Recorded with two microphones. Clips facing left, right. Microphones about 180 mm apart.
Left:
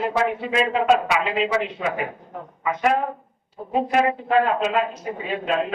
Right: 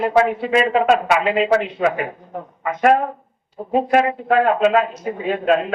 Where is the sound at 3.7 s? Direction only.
55° right (ahead or behind).